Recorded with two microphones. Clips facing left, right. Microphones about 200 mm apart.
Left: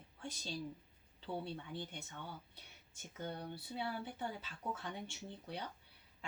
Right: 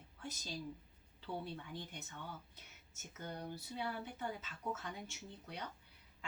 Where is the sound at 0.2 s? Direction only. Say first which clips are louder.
Left 1 dB; 30° left (ahead or behind).